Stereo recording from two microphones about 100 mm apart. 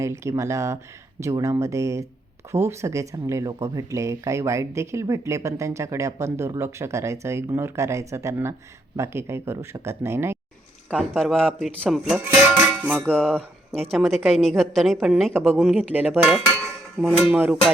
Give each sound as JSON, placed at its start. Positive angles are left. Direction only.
{"t": 0.0, "sound": "speech", "side_deg": -30}
{"t": 11.1, "sound": "a man's voice", "side_deg": 5}
{"t": 11.9, "sound": "music", "side_deg": -5}
{"t": 13.1, "sound": "a man's voice", "side_deg": 10}
{"t": 13.9, "sound": "a woman's voice", "side_deg": 0}
{"t": 15.3, "sound": "speech", "side_deg": -20}
{"t": 15.6, "sound": "music", "side_deg": -15}